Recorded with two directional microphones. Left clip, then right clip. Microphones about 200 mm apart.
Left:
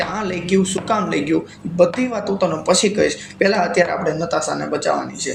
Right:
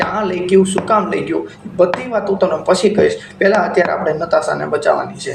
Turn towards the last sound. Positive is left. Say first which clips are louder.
# right 5 dB
turn(degrees=35)  # may be behind; listen again after turning